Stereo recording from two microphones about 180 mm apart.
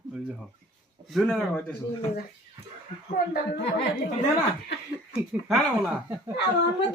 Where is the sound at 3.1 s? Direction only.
55° left (ahead or behind).